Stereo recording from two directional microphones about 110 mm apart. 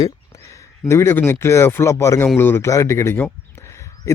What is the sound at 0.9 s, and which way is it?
A man's voice, 25° left (ahead or behind).